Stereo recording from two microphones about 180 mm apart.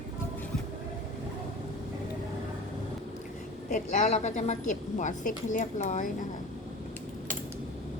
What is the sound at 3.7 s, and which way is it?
A woman's voice, 45° left (ahead or behind).